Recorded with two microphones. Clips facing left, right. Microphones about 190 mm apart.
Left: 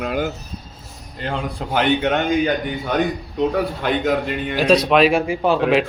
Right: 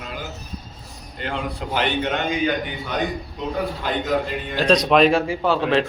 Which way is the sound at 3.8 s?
65° left (ahead or behind).